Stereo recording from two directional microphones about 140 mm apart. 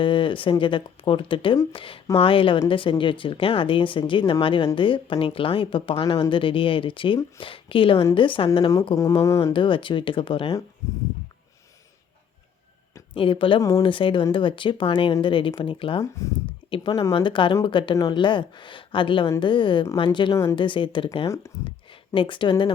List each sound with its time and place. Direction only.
0.0 s speech: 35° left (ahead or behind)
9.2 s speech: 20° left (ahead or behind)
9.5 s speech: 35° left (ahead or behind)
13.1 s speech: 40° left (ahead or behind)
13.6 s speech: 25° left (ahead or behind)
13.8 s speech: 35° left (ahead or behind)
16.9 s speech: 25° left (ahead or behind)
17.2 s speech: 35° left (ahead or behind)
20.3 s speech: 20° left (ahead or behind)
20.6 s speech: 35° left (ahead or behind)